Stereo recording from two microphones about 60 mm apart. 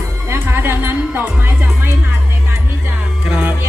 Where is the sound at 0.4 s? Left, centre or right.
Right.